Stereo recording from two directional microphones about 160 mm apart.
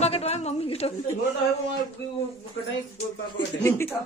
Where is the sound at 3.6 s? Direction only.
15° left (ahead or behind).